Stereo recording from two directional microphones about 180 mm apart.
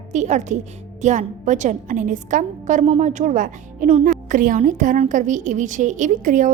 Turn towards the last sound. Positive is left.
turn(degrees=-45)  # may be behind; listen again after turning